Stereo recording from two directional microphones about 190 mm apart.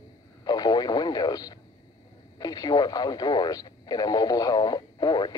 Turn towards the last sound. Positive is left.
turn(degrees=20)  # may be behind; listen again after turning